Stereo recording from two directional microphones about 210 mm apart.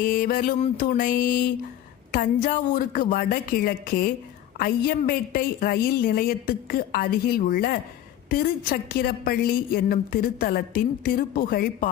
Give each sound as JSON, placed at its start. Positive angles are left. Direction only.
{"t": 0.0, "sound": "music", "side_deg": 40}
{"t": 2.1, "sound": "a woman's voice", "side_deg": 40}